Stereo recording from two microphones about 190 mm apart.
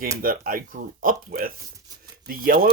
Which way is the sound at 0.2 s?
50° right (ahead or behind).